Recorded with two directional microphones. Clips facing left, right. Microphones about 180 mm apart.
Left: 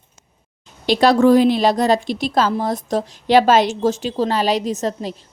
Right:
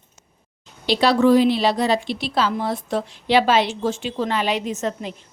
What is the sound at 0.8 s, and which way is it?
A woman's voice, 45° left (ahead or behind).